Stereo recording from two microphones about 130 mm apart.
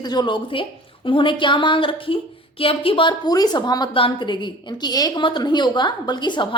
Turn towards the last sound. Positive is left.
turn(degrees=35)  # may be behind; listen again after turning